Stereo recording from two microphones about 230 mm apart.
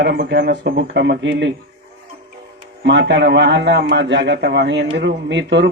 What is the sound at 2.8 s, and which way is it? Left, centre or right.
A man's voice, right.